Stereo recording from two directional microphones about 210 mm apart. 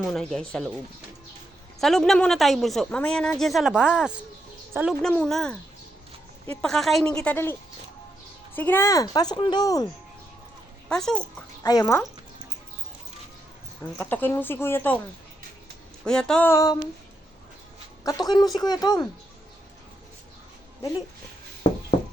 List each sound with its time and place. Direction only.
0.1 s a woman's voice: centre (ahead or behind)
1.8 s a woman's voice: centre (ahead or behind)
5.0 s a woman's voice: 5° left (ahead or behind)
6.6 s a woman's voice: centre (ahead or behind)
8.5 s speech: 10° left (ahead or behind)
10.8 s a child's voice: 5° left (ahead or behind)
11.6 s speech: 15° left (ahead or behind)
14.0 s speech: 10° left (ahead or behind)
16.0 s a woman's voice: 5° left (ahead or behind)
18.0 s speech: 15° left (ahead or behind)